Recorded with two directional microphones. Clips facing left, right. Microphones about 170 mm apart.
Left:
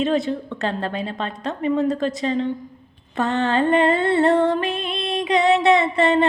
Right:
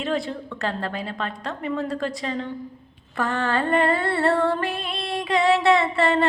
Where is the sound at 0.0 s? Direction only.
20° left (ahead or behind).